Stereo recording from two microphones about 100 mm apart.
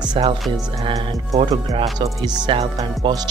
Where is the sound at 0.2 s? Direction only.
60° right (ahead or behind).